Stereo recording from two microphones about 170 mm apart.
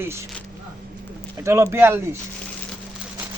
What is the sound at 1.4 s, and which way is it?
Speech, 15° right (ahead or behind).